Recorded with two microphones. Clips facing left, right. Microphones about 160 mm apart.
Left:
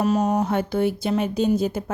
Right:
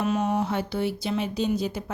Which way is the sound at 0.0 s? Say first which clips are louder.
Left 4 dB; 40° left (ahead or behind).